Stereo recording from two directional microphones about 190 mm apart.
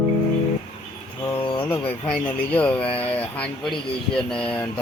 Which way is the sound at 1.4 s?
30° left (ahead or behind).